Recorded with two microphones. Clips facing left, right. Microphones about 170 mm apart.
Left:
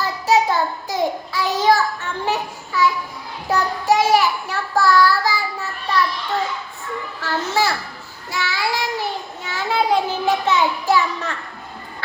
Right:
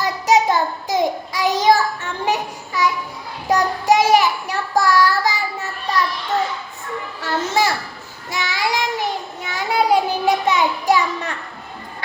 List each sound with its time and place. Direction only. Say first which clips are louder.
0.0 s child singing: right 1 dB; 20° right (ahead or behind)
3.8 s child singing: right 1 dB; 20° right (ahead or behind)
7.2 s children playing: right 1 dB; 20° right (ahead or behind)
8.3 s child singing: right 1 dB; 20° right (ahead or behind)
9.5 s a sound: right 2 dB; 15° right (ahead or behind)